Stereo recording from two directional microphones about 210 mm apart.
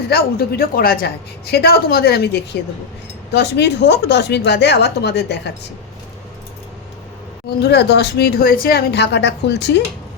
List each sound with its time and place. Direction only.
0.1 s speech: 45° left (ahead or behind)
7.6 s speech: 50° left (ahead or behind)